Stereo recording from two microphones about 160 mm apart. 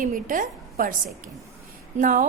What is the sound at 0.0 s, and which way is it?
A woman's voice, 55° right (ahead or behind).